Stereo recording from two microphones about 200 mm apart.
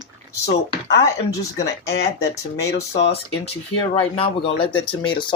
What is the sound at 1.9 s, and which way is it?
Speech, 55° left (ahead or behind).